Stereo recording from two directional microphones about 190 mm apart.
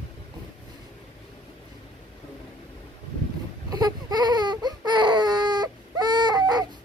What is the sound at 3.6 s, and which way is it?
Baby cry, 20° right (ahead or behind).